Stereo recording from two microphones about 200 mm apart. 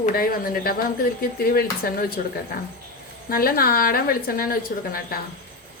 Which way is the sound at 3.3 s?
50° left (ahead or behind).